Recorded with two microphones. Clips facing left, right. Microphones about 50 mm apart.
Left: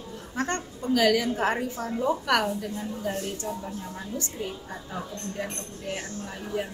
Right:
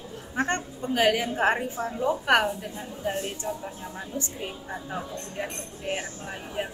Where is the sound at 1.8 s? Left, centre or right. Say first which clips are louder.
Left 1 dB; centre.